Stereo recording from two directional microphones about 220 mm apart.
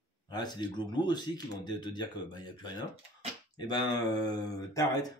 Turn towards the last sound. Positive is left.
turn(degrees=15)  # may be behind; listen again after turning